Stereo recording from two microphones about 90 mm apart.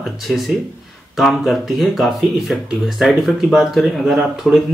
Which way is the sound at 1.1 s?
Centre (ahead or behind).